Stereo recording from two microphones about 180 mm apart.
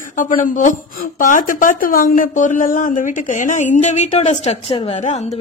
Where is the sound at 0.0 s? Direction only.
45° left (ahead or behind).